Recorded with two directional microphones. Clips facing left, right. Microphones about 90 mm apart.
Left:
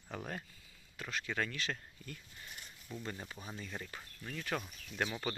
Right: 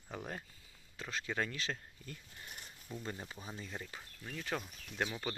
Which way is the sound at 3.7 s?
5° right (ahead or behind).